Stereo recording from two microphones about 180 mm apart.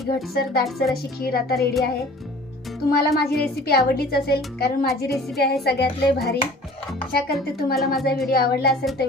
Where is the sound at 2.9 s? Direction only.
60° left (ahead or behind).